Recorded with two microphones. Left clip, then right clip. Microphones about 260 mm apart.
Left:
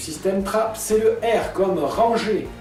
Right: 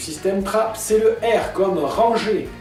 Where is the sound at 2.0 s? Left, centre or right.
Right.